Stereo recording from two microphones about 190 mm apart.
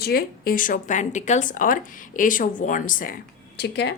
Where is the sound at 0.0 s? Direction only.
55° left (ahead or behind).